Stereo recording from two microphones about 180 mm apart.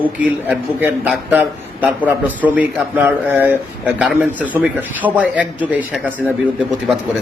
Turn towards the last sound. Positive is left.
turn(degrees=-5)  # may be behind; listen again after turning